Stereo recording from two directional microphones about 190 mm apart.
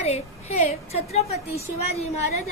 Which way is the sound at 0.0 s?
35° left (ahead or behind).